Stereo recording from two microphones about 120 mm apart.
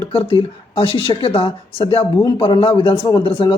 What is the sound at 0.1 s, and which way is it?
Speech, 50° left (ahead or behind).